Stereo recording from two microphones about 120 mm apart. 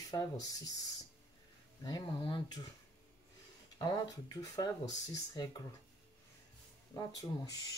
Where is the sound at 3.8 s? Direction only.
30° left (ahead or behind).